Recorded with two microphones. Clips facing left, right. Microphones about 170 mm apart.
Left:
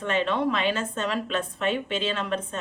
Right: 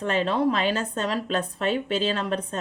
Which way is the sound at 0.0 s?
35° right (ahead or behind).